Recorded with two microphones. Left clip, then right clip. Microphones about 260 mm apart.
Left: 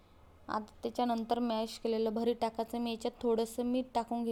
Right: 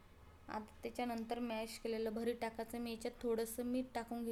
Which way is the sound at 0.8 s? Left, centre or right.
Left.